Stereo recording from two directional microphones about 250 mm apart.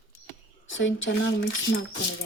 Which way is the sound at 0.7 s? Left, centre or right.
Left.